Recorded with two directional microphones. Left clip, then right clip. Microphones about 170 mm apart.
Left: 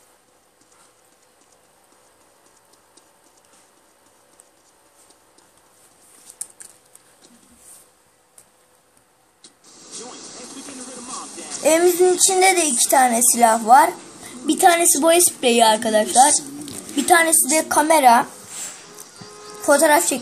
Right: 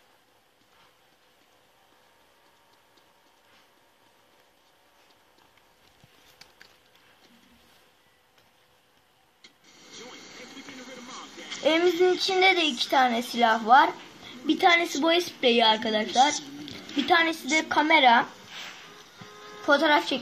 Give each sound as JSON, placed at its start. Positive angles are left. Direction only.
{"t": 6.3, "sound": "typing", "side_deg": 10}
{"t": 9.4, "sound": "vehicle", "side_deg": -5}
{"t": 9.8, "sound": "vehicle", "side_deg": 65}
{"t": 10.1, "sound": "vehicle", "side_deg": -5}
{"t": 10.7, "sound": "a sound", "side_deg": 35}
{"t": 11.6, "sound": "a woman's voice", "side_deg": 30}
{"t": 18.9, "sound": "music", "side_deg": 35}